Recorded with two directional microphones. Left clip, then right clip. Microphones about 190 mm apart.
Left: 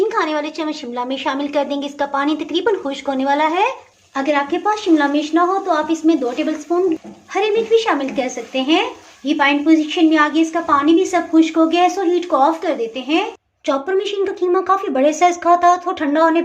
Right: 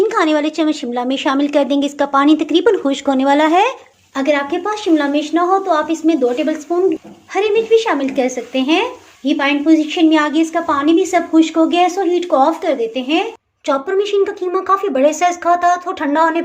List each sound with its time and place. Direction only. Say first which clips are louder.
0.1 s speech: right 4 dB; 35° right (ahead or behind)
4.1 s a woman's voice: right 2 dB; 20° right (ahead or behind)